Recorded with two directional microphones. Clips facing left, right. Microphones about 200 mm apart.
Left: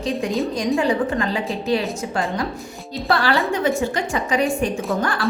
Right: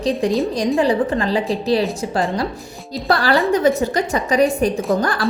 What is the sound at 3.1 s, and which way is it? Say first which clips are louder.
A woman's voice: right 4 dB; 40° right (ahead or behind).